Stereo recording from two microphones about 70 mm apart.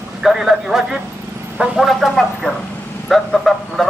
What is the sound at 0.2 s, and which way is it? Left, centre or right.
A man's voice, centre.